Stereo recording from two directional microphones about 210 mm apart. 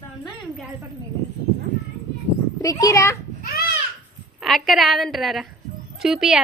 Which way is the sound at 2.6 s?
15° left (ahead or behind).